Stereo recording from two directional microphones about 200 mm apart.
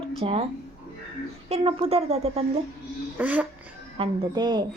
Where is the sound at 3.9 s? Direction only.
25° right (ahead or behind).